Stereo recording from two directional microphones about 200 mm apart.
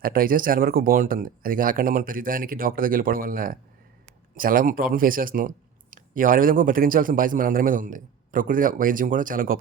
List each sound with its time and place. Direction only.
0.0 s a man's voice: 45° right (ahead or behind)